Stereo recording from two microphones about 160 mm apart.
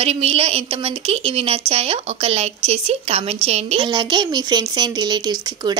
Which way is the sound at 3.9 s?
30° right (ahead or behind).